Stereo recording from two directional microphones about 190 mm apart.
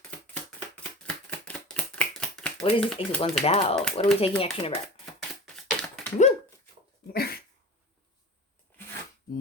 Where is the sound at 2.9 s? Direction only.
30° left (ahead or behind).